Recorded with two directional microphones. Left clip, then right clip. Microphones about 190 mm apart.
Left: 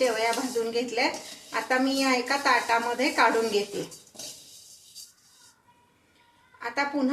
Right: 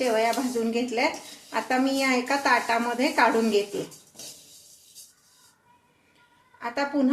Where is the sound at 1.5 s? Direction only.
40° right (ahead or behind).